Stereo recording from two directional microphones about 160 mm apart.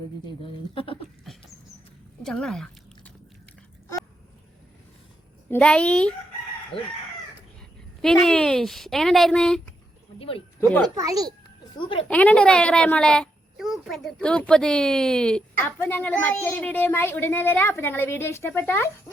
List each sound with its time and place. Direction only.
0.3 s speech: 30° left (ahead or behind)
2.2 s a sound: centre (ahead or behind)
5.5 s a child's voice: 5° left (ahead or behind)
6.7 s speech: 35° left (ahead or behind)
8.0 s a woman's voice: 5° left (ahead or behind)
10.2 s speech: 35° left (ahead or behind)
10.6 s speech: 15° left (ahead or behind)
10.8 s a child's voice: 20° right (ahead or behind)
11.8 s speech: 35° left (ahead or behind)
12.0 s a child's voice: 10° left (ahead or behind)